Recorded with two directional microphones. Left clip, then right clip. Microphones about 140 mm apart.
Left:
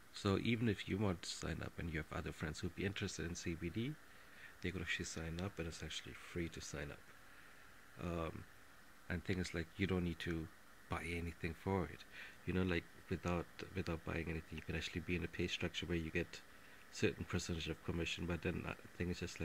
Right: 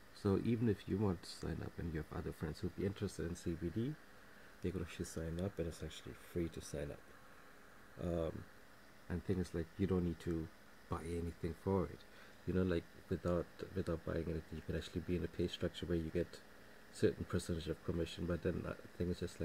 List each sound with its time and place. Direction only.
0.2 s speech: 10° left (ahead or behind)
8.0 s speech: centre (ahead or behind)
17.3 s speech: 15° left (ahead or behind)